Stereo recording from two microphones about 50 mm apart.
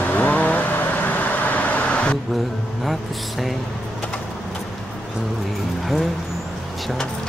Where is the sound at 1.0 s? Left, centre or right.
Left.